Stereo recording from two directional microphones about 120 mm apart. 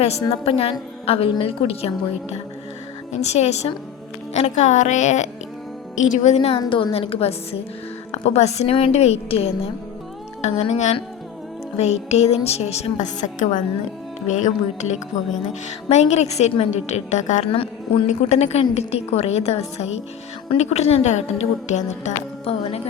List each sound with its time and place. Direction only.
0.3 s a woman's voice: 50° left (ahead or behind)
3.1 s a woman's voice: 65° left (ahead or behind)
4.4 s a woman's voice: 80° left; by 6.6 s 60° left (ahead or behind)
6.6 s a woman's voice: 40° left (ahead or behind); by 9.5 s 60° left (ahead or behind)
10.4 s speech: 75° left (ahead or behind)
11.8 s a woman's voice: 65° left (ahead or behind); by 15.0 s 80° left
15.9 s speech: 65° left (ahead or behind); by 17.4 s 85° left
17.4 s a woman's voice: 50° left (ahead or behind)
18.3 s a woman's voice: 65° left (ahead or behind)